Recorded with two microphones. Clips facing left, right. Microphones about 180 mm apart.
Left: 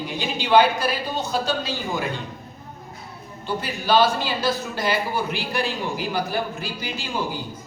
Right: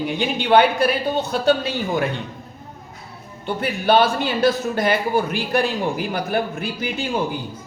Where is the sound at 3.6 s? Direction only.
55° right (ahead or behind).